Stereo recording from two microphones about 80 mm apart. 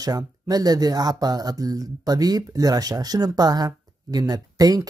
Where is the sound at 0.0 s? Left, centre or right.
Right.